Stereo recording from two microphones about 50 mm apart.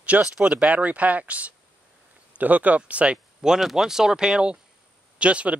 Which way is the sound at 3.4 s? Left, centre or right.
Centre.